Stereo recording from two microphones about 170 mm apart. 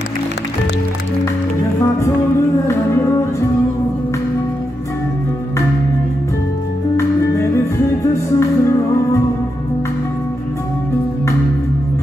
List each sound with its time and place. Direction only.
1.8 s music: 20° left (ahead or behind)
8.1 s music: 15° left (ahead or behind)